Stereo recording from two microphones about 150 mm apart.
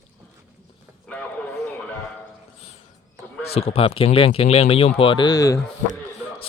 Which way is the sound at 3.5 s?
40° left (ahead or behind).